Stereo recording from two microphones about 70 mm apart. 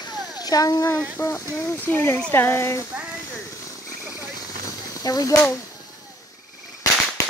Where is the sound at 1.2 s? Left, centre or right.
Left.